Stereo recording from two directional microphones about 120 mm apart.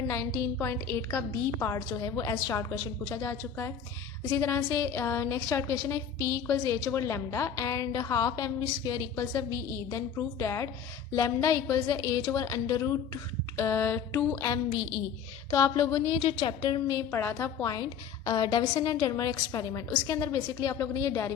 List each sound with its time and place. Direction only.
0.1 s a woman's voice: 25° left (ahead or behind)
13.6 s a woman's voice: 20° left (ahead or behind); by 16.8 s 45° left (ahead or behind)
16.9 s a woman's voice: 20° left (ahead or behind)
18.3 s a woman's voice: 40° left (ahead or behind)